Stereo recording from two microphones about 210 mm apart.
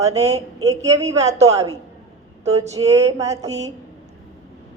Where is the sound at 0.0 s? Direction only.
15° right (ahead or behind).